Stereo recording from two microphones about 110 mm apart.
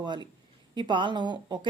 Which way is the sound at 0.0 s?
45° right (ahead or behind).